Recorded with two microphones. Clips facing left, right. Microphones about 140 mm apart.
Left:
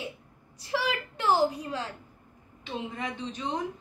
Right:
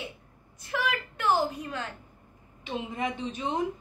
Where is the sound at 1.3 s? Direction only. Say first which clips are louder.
Left 3 dB; 30° left (ahead or behind).